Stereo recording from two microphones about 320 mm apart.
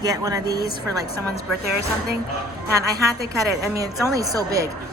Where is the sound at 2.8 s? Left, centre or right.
Centre.